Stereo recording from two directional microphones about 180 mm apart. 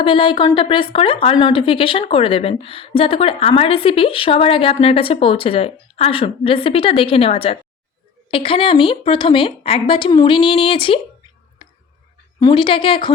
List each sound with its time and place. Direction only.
0.0 s a woman's voice: 30° left (ahead or behind)
12.4 s a woman's voice: 25° left (ahead or behind)